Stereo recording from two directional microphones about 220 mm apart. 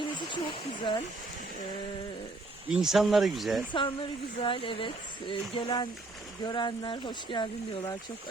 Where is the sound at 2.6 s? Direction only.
Centre (ahead or behind).